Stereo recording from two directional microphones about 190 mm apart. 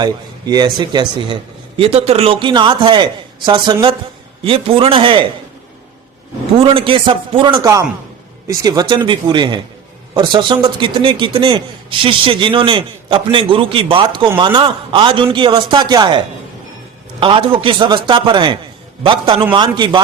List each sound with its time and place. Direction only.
0.0 s a man's voice: 20° right (ahead or behind)
6.6 s a man's voice: 30° right (ahead or behind)